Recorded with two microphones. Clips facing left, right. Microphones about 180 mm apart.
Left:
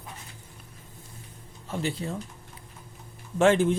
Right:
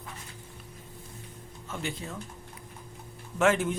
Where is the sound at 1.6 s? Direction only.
35° left (ahead or behind).